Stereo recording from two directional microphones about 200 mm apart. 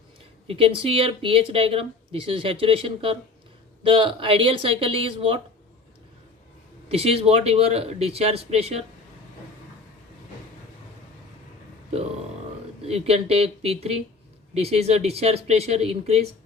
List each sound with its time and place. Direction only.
0.4 s speech: 25° right (ahead or behind)
6.9 s speech: 30° right (ahead or behind)
12.9 s speech: 30° right (ahead or behind)